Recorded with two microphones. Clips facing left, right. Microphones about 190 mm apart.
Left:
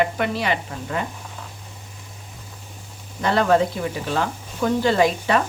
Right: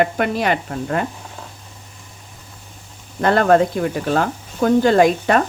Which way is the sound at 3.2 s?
55° right (ahead or behind).